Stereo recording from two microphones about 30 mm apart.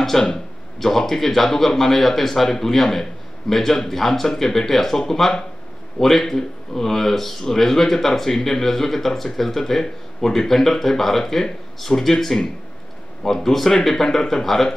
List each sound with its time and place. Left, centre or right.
0.1 s speech: centre